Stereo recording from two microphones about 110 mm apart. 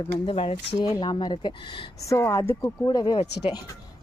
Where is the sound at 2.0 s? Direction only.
25° left (ahead or behind).